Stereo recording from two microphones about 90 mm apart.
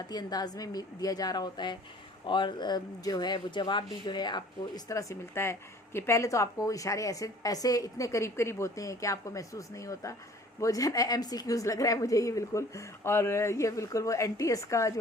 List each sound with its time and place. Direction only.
0.1 s a woman's voice: 50° left (ahead or behind)
4.9 s a woman's voice: 35° left (ahead or behind)